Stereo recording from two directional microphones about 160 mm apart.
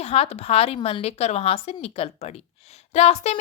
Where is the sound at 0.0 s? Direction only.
40° left (ahead or behind).